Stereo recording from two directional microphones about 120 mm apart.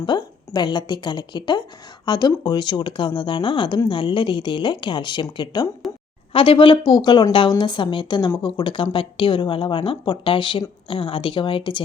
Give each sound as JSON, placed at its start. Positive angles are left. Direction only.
{"t": 0.0, "sound": "a woman's voice", "side_deg": 40}
{"t": 5.8, "sound": "a sound", "side_deg": 0}
{"t": 6.3, "sound": "a woman's voice", "side_deg": 50}